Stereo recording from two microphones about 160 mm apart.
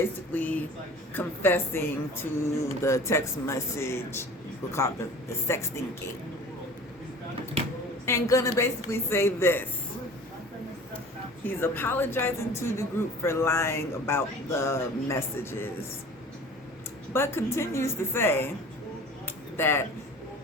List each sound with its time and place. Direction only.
0.0 s a woman's voice: 10° left (ahead or behind)
8.0 s a woman's voice: 20° left (ahead or behind)
11.4 s a woman's voice: 15° left (ahead or behind)
17.2 s a woman's voice: 15° left (ahead or behind)
19.5 s speech: 15° left (ahead or behind)